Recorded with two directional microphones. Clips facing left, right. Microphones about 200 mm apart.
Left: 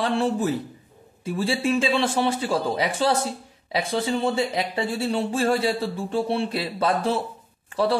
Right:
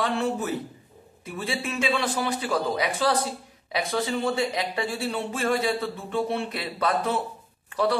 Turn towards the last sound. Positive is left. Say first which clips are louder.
# left 2 dB
turn(degrees=30)  # may be behind; listen again after turning